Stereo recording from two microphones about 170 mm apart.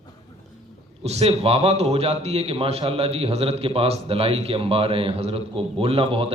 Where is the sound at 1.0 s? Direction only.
40° right (ahead or behind).